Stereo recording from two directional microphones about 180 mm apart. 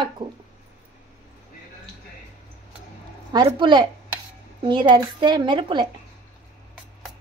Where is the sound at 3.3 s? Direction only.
25° right (ahead or behind).